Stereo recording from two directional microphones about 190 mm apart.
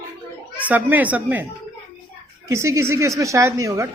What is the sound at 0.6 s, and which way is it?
Speech, 10° right (ahead or behind).